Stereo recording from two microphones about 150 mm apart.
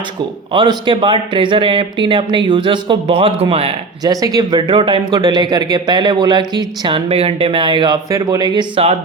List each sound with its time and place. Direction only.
0.5 s speech: 30° right (ahead or behind)
4.0 s speech: 25° right (ahead or behind)
8.1 s speech: 25° right (ahead or behind); by 9.0 s 40° right (ahead or behind)